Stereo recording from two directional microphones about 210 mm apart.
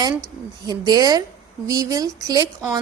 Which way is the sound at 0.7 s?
20° right (ahead or behind).